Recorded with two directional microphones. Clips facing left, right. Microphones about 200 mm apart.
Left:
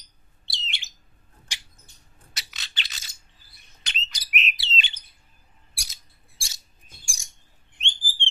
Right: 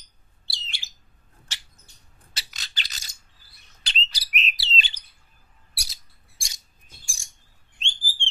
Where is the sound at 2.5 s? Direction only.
40° right (ahead or behind).